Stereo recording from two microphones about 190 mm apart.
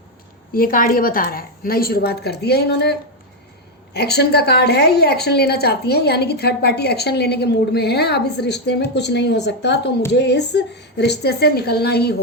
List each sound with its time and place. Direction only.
0.5 s a woman's voice: 50° left (ahead or behind)
3.9 s a woman's voice: 60° left (ahead or behind)